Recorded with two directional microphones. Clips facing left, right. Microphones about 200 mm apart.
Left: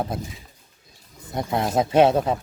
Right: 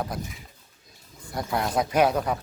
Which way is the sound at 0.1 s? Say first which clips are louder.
Left 3 dB; 25° left (ahead or behind).